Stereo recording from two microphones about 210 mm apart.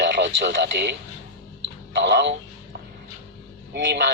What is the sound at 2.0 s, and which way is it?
Speech, 55° right (ahead or behind).